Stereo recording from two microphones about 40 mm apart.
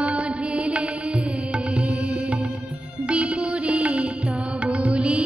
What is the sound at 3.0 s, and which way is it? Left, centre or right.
Music, right.